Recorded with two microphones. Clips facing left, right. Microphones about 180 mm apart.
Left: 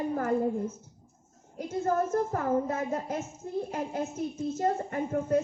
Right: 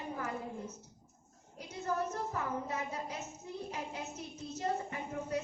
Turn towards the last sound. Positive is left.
turn(degrees=50)  # may be behind; listen again after turning